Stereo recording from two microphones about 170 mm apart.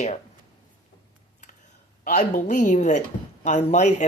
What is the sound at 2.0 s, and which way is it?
Speech, 50° left (ahead or behind).